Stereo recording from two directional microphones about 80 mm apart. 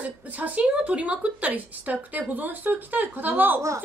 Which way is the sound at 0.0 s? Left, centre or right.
Centre.